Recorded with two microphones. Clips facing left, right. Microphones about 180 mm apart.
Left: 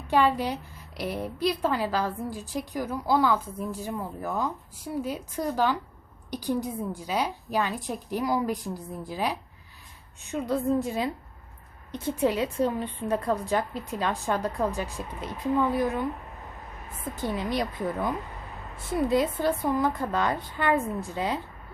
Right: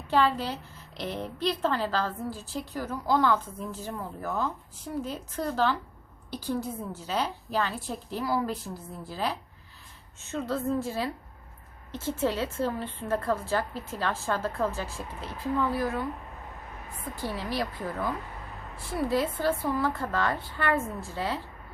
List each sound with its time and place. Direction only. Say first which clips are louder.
0.1 s a woman's voice: left 2 dB; 15° left (ahead or behind)
17.2 s a woman's voice: left 3 dB; 20° left (ahead or behind)